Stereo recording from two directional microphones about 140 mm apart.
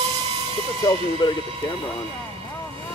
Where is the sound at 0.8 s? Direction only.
35° left (ahead or behind).